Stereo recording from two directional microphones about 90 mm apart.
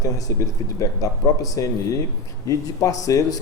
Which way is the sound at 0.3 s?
35° left (ahead or behind).